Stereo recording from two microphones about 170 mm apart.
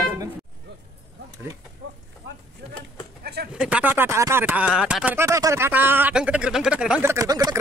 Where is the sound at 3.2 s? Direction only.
70° right (ahead or behind).